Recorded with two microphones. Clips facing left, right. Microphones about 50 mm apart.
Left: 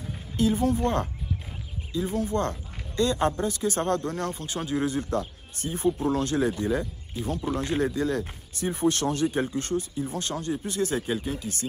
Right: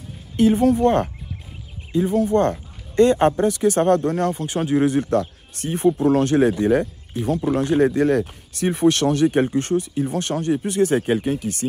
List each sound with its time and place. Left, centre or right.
0.4 s speech: right